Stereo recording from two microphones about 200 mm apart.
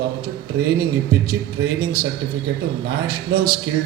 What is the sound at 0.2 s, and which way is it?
A man's voice, 50° right (ahead or behind).